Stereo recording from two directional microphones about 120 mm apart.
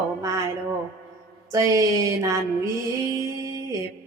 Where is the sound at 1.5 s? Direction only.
30° right (ahead or behind).